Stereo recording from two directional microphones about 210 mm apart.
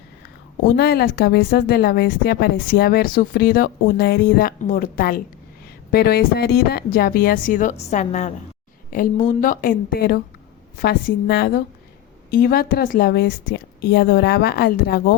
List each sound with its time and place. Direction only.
0.8 s a woman's voice: 50° left (ahead or behind)